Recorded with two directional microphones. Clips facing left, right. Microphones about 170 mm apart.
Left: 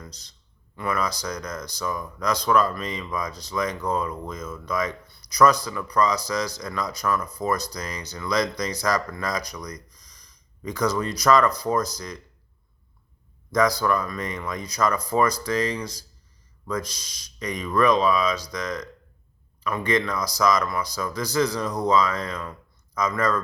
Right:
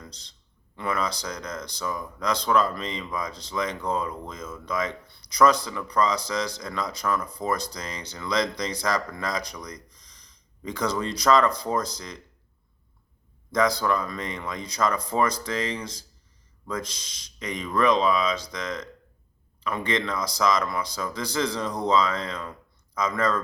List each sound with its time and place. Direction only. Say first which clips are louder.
0.0 s a man's voice: left 2 dB; 25° right (ahead or behind)
13.5 s speech: left 2 dB; 25° right (ahead or behind)